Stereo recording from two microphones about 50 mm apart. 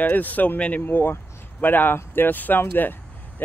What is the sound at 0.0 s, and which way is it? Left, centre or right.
Speech, left.